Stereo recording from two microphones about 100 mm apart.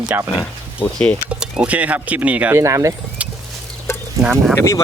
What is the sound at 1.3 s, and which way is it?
Speech, 10° right (ahead or behind).